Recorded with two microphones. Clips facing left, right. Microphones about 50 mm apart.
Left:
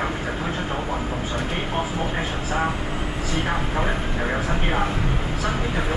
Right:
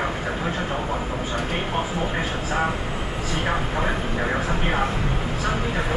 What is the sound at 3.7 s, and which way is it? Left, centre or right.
Speech, centre.